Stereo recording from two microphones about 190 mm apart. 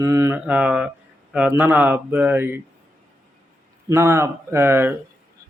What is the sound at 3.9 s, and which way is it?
Speech, 15° right (ahead or behind).